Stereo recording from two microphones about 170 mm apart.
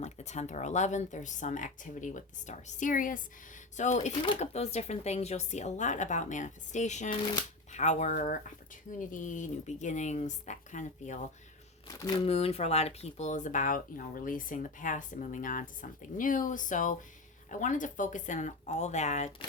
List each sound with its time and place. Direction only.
0.0 s speech: 40° left (ahead or behind)
12.2 s speech: 35° left (ahead or behind)